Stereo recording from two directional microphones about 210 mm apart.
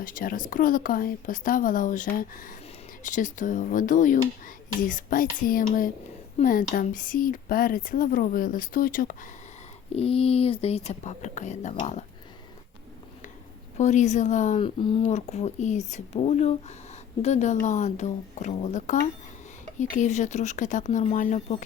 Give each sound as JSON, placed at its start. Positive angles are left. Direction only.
{"t": 0.0, "sound": "speech", "side_deg": 40}
{"t": 9.9, "sound": "speech", "side_deg": 30}
{"t": 13.7, "sound": "speech", "side_deg": 35}
{"t": 14.6, "sound": "speech", "side_deg": 25}